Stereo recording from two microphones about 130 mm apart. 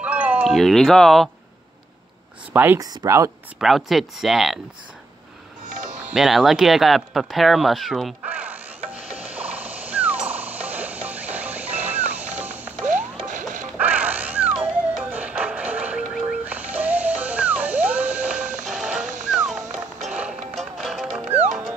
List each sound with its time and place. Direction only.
0.0 s a sound: 10° right (ahead or behind)
0.5 s speech: centre (ahead or behind)
2.5 s speech: 15° right (ahead or behind)
2.8 s speech: 30° right (ahead or behind)
3.5 s speech: centre (ahead or behind)
5.7 s sitar: 70° right (ahead or behind)
6.1 s speech: centre (ahead or behind)
8.3 s music: 10° right (ahead or behind)
12.8 s mechanisms: 75° right (ahead or behind)
13.7 s cat: 10° right (ahead or behind)
15.0 s music: 10° right (ahead or behind)